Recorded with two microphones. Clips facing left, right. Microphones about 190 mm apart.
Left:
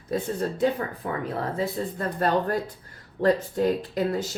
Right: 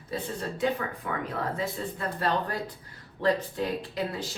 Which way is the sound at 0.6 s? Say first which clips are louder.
Left 2 dB; 35° left (ahead or behind).